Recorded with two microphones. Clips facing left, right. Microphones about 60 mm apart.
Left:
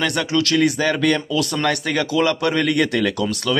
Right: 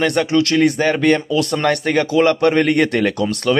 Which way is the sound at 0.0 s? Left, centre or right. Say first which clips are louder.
Right 4 dB; right.